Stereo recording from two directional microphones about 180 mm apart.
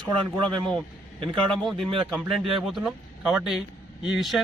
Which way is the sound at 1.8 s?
30° right (ahead or behind).